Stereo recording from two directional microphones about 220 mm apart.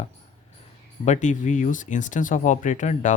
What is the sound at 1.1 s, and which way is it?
Speech, 35° left (ahead or behind).